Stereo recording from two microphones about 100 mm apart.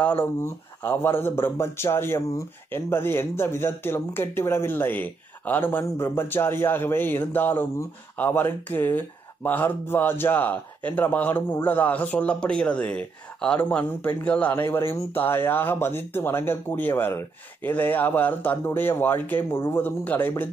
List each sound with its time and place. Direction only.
0.0 s speech: 20° left (ahead or behind)